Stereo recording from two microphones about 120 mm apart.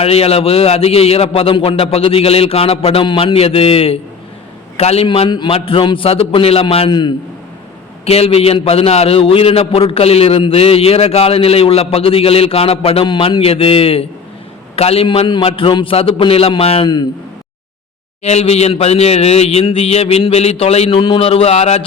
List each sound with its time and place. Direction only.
0.0 s a man's voice: 55° left (ahead or behind)
3.3 s a man's voice: 55° left (ahead or behind)
5.0 s a man's voice: 45° left (ahead or behind)
8.0 s a man's voice: 55° left (ahead or behind)
15.0 s a man's voice: 45° left (ahead or behind)
18.2 s speech: 65° left (ahead or behind)